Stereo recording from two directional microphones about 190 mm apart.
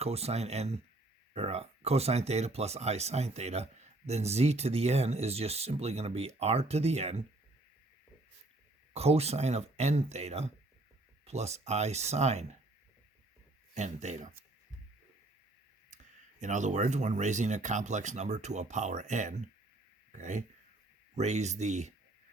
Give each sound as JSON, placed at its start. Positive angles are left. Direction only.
{"t": 0.0, "sound": "speech", "side_deg": -35}
{"t": 8.9, "sound": "speech", "side_deg": -35}
{"t": 13.7, "sound": "speech", "side_deg": -35}
{"t": 16.4, "sound": "speech", "side_deg": -40}